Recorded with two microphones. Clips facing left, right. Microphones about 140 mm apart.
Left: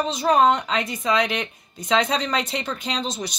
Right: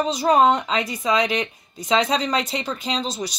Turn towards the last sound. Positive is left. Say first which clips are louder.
# right 2 dB
turn(degrees=-5)  # may be behind; listen again after turning